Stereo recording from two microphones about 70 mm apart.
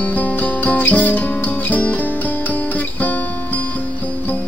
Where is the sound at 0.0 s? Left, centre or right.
Left.